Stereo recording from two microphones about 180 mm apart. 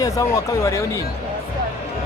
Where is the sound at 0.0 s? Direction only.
20° left (ahead or behind).